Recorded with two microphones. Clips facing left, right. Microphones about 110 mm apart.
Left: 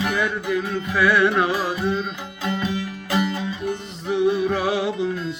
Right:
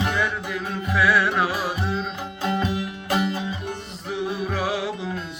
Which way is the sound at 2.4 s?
30° right (ahead or behind).